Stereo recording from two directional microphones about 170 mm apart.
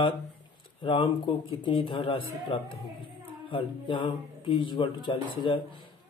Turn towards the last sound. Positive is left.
turn(degrees=30)  # may be behind; listen again after turning